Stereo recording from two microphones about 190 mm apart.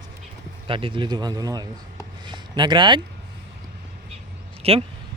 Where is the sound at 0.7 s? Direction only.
25° right (ahead or behind).